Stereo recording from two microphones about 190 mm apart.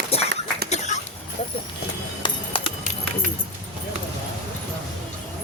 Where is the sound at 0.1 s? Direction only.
30° left (ahead or behind).